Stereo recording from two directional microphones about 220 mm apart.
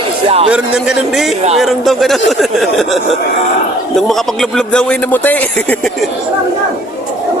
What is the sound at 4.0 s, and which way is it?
Speech, centre (ahead or behind).